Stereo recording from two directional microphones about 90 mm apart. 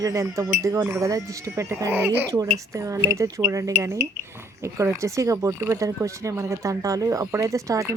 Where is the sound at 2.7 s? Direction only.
35° right (ahead or behind).